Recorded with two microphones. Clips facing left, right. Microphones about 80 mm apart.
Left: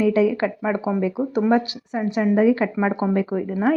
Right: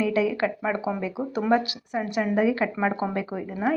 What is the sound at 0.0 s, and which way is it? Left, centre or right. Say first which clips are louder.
Speech: left 5 dB; left.